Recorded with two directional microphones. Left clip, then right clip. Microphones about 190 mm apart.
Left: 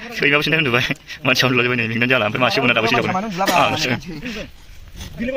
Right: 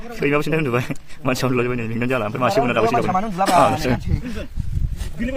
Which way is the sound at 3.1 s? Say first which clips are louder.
Right 1 dB; 15° right (ahead or behind).